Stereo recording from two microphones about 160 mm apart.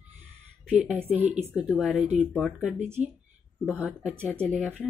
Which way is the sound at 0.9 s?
10° right (ahead or behind).